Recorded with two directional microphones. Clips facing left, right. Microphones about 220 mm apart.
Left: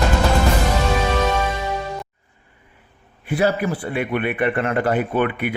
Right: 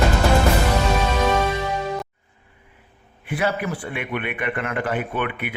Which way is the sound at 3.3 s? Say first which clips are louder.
Left 4 dB; 35° left (ahead or behind).